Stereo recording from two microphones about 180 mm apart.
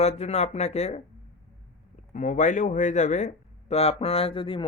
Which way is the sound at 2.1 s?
45° left (ahead or behind).